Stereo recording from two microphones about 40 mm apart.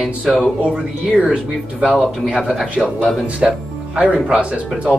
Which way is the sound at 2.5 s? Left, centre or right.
Centre.